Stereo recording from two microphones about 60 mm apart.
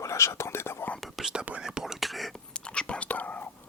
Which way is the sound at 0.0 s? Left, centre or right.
Left.